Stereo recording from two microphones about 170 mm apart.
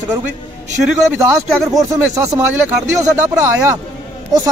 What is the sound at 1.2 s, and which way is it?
A man's voice, 20° right (ahead or behind).